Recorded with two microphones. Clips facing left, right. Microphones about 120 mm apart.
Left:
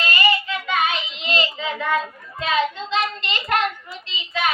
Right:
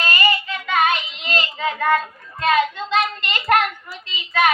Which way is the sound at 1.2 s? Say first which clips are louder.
Right 1 dB; 50° right (ahead or behind).